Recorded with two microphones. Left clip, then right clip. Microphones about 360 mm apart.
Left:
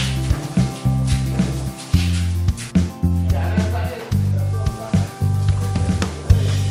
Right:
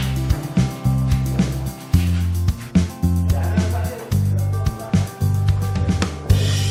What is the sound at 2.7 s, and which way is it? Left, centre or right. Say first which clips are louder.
Music: right 1 dB; centre.